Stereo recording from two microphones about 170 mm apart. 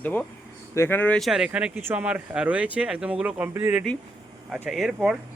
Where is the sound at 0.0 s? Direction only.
10° left (ahead or behind).